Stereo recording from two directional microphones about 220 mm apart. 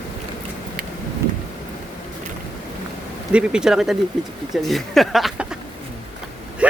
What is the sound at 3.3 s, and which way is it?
Speech, 5° right (ahead or behind).